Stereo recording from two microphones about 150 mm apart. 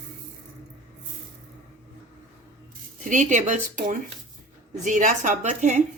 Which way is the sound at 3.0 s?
55° right (ahead or behind).